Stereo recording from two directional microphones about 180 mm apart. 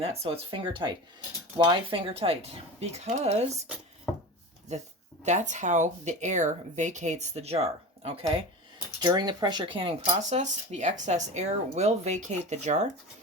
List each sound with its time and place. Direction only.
0.0 s speech: 35° right (ahead or behind)
5.2 s speech: 40° right (ahead or behind)